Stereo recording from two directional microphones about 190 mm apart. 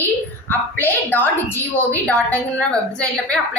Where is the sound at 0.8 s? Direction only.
10° left (ahead or behind).